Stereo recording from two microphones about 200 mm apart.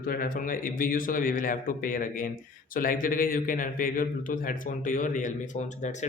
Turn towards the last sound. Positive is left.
turn(degrees=40)  # may be behind; listen again after turning